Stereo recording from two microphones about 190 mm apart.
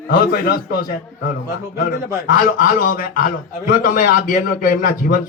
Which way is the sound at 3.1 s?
50° left (ahead or behind).